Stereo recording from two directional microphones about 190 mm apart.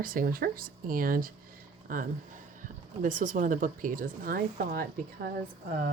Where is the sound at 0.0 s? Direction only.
50° right (ahead or behind).